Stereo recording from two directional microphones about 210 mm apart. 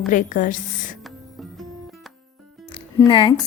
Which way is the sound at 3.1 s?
25° left (ahead or behind).